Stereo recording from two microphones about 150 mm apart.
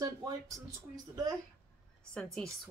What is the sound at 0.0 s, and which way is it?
Speech, 25° right (ahead or behind).